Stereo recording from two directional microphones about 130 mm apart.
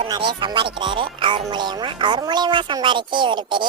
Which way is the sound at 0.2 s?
35° right (ahead or behind).